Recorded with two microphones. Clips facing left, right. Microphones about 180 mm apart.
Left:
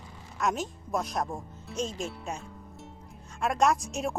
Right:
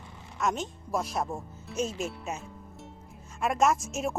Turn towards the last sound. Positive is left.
turn(degrees=0)  # may be behind; listen again after turning